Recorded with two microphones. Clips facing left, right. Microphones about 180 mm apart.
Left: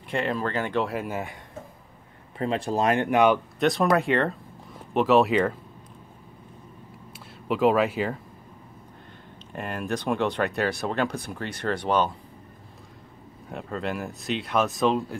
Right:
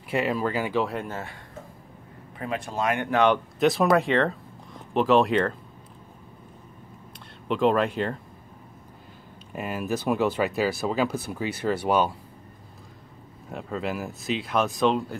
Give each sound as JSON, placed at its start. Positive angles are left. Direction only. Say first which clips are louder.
{"t": 0.1, "sound": "speech", "louder": "right 2 dB", "side_deg": -5}
{"t": 1.0, "sound": "speech", "louder": "left 3 dB", "side_deg": 15}
{"t": 2.3, "sound": "speech", "louder": "left 5 dB", "side_deg": 30}
{"t": 3.1, "sound": "speech", "louder": "even", "side_deg": 10}
{"t": 3.5, "sound": "speech", "louder": "right 1 dB", "side_deg": 0}
{"t": 7.4, "sound": "speech", "louder": "left 1 dB", "side_deg": 5}
{"t": 9.5, "sound": "speech", "louder": "right 1 dB", "side_deg": -5}
{"t": 13.5, "sound": "speech", "louder": "even", "side_deg": 0}